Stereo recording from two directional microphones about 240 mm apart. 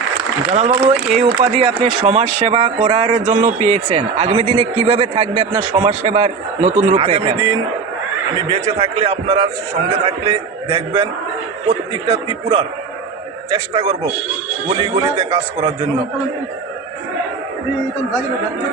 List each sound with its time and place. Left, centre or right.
0.5 s a man's voice: right
8.8 s a man's voice: right